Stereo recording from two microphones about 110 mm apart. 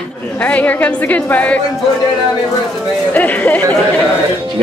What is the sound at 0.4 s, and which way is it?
A woman's voice, 15° left (ahead or behind).